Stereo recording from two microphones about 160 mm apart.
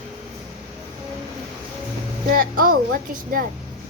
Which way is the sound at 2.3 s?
65° right (ahead or behind).